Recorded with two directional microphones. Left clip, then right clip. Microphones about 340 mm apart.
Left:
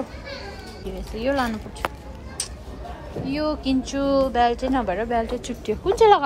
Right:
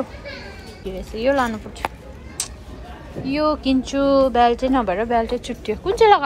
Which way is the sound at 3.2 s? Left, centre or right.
Centre.